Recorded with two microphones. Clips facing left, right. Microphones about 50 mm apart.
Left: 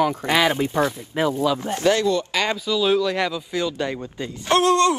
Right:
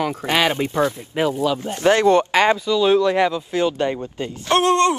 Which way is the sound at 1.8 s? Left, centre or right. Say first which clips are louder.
Right 6 dB; right.